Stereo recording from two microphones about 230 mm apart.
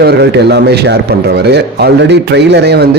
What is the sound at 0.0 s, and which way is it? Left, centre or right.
A man's voice, right.